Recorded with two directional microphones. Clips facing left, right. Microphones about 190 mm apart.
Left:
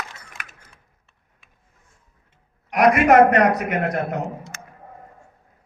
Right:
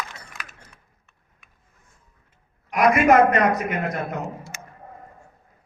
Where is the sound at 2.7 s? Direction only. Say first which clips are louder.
Left 2 dB; 70° left (ahead or behind).